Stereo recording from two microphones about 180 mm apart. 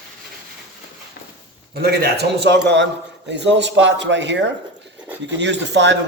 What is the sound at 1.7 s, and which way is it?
Speech, 65° right (ahead or behind).